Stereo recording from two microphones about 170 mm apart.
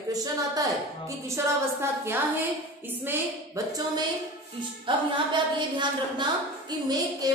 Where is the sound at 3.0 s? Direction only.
20° right (ahead or behind).